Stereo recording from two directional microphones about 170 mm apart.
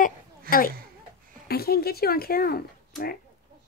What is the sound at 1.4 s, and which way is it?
Speech, 65° left (ahead or behind).